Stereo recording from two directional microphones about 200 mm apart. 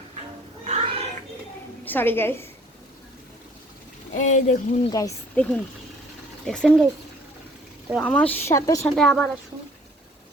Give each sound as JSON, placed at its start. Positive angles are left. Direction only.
{"t": 0.6, "sound": "cat", "side_deg": -30}
{"t": 1.8, "sound": "speech", "side_deg": 10}
{"t": 4.1, "sound": "speech", "side_deg": 40}
{"t": 4.9, "sound": "speech", "side_deg": 15}
{"t": 7.9, "sound": "speech", "side_deg": 0}
{"t": 9.0, "sound": "a woman's voice", "side_deg": 5}